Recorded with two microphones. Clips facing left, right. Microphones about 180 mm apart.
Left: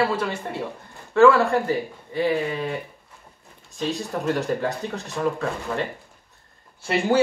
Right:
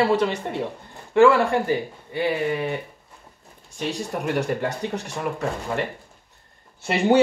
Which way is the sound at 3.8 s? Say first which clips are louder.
Left 1 dB; 15° right (ahead or behind).